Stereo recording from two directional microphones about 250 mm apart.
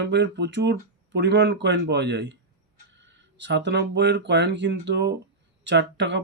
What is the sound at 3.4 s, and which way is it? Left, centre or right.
Speech, right.